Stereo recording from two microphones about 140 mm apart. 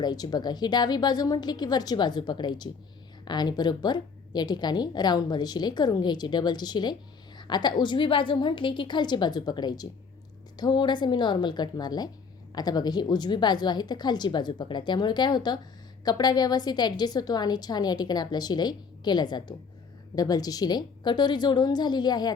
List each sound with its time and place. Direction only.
0.0 s a woman's voice: 30° left (ahead or behind)